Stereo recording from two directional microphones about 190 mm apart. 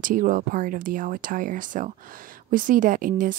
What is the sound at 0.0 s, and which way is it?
Speech, 45° right (ahead or behind).